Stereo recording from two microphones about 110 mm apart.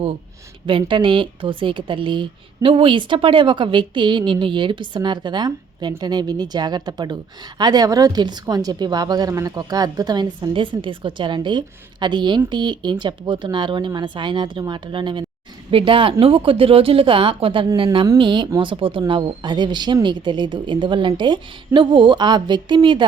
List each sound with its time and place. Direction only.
0.7 s a woman's voice: 50° right (ahead or behind)
10.5 s a woman's voice: 50° right (ahead or behind)
17.8 s a woman's voice: 35° right (ahead or behind)